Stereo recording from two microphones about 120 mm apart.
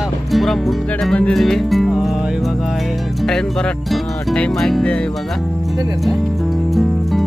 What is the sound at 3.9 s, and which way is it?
Music, 5° left (ahead or behind).